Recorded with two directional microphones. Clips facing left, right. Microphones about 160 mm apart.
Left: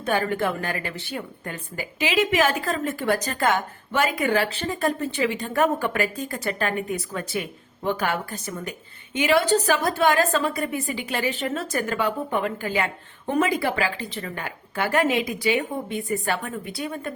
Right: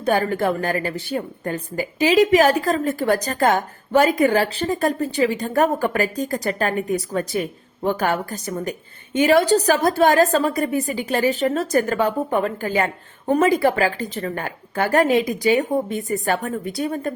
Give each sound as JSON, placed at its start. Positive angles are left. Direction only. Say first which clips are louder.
{"t": 0.0, "sound": "a woman's voice", "louder": "right 4 dB", "side_deg": -40}